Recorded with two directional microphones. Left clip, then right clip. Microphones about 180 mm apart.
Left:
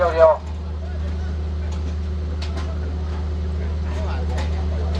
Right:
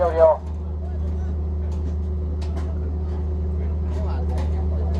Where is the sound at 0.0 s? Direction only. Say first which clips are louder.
Left 2 dB; 45° right (ahead or behind).